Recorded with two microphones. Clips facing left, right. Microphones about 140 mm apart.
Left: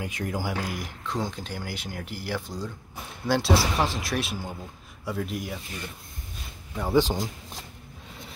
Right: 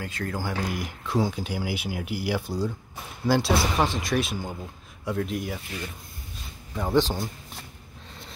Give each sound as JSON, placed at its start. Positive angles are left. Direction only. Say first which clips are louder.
{"t": 0.0, "sound": "speech", "louder": "left 1 dB", "side_deg": 15}
{"t": 0.7, "sound": "speech", "louder": "right 2 dB", "side_deg": 0}
{"t": 6.7, "sound": "speech", "louder": "even", "side_deg": 10}